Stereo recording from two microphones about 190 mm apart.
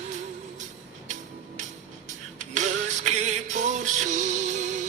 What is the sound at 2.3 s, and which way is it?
Music, 40° right (ahead or behind).